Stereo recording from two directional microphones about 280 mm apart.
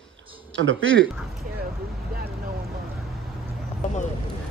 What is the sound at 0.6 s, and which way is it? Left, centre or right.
Speech, right.